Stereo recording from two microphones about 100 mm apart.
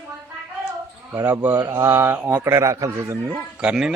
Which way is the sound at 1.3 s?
15° right (ahead or behind).